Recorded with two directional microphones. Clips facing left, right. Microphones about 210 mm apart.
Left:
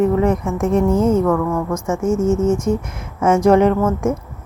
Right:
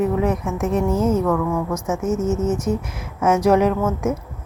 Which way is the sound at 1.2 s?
5° right (ahead or behind).